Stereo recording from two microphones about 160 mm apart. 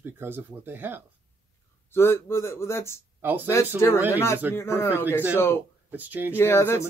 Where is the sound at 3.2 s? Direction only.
10° right (ahead or behind).